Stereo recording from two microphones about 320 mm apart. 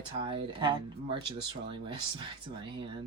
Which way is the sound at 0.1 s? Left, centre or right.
Centre.